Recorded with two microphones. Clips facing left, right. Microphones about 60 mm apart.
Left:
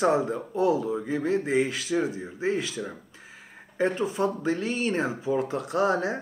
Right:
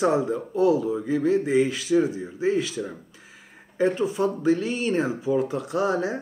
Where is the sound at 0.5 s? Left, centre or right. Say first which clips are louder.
Right 3 dB; left.